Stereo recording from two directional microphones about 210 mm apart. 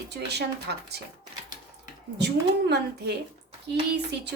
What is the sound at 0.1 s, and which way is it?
Speech, 55° right (ahead or behind).